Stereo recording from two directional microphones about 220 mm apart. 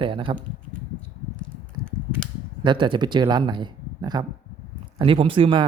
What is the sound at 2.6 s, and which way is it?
Speech, 20° right (ahead or behind).